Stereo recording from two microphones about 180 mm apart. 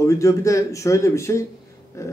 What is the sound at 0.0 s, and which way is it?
A man's voice, 15° left (ahead or behind).